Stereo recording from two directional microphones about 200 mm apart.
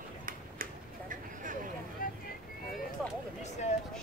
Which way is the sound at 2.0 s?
45° left (ahead or behind).